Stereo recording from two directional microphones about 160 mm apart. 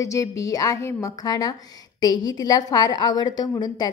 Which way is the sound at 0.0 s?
20° left (ahead or behind).